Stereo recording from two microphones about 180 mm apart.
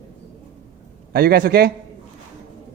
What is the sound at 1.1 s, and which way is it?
Speech, 55° right (ahead or behind).